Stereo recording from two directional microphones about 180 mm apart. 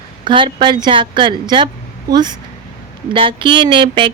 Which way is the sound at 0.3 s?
25° right (ahead or behind).